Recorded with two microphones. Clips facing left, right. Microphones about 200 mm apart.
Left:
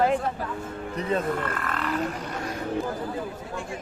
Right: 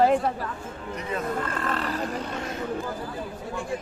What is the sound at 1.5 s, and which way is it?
Speech, 30° right (ahead or behind).